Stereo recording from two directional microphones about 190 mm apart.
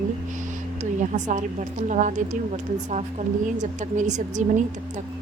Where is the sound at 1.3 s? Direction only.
40° right (ahead or behind).